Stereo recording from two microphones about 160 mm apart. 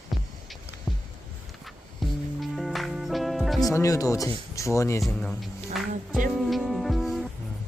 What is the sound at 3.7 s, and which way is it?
Speech, 20° left (ahead or behind).